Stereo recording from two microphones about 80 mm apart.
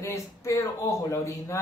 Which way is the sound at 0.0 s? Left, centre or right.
Left.